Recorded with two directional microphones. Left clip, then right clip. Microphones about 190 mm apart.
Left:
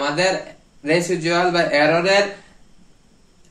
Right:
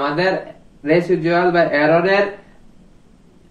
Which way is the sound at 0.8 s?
30° left (ahead or behind).